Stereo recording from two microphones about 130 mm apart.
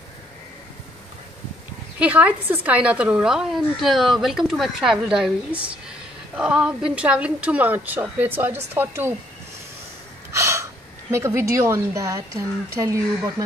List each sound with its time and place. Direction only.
2.0 s a woman's voice: 10° right (ahead or behind)
10.3 s a woman's voice: 20° right (ahead or behind)